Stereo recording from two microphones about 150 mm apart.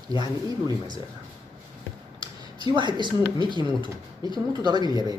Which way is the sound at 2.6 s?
30° right (ahead or behind).